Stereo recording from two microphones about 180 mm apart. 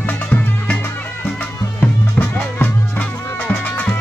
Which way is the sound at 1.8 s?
10° left (ahead or behind).